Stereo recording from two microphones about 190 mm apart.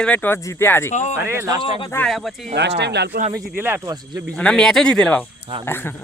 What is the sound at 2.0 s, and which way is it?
Speech, centre (ahead or behind).